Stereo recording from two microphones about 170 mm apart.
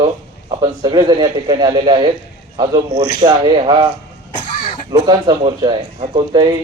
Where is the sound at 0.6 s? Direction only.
25° right (ahead or behind).